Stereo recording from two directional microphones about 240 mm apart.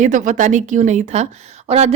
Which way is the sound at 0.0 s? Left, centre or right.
Right.